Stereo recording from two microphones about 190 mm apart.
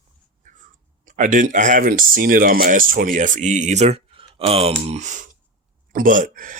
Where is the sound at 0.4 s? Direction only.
40° right (ahead or behind).